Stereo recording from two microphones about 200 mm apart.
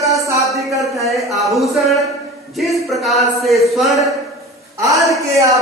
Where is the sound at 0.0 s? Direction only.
15° right (ahead or behind).